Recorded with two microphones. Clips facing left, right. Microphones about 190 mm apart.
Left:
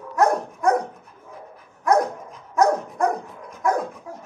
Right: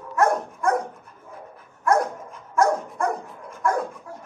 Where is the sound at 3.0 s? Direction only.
40° left (ahead or behind).